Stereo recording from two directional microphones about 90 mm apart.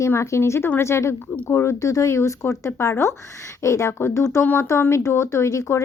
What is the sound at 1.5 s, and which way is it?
A woman's voice, 30° left (ahead or behind).